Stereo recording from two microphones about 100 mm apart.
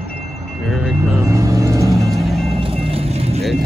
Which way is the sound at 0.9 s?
25° right (ahead or behind).